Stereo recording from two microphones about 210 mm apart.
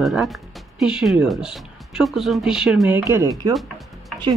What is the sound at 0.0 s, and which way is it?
Speech, centre (ahead or behind).